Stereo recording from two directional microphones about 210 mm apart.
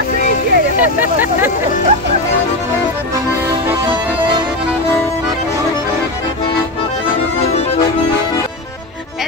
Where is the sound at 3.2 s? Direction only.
15° right (ahead or behind).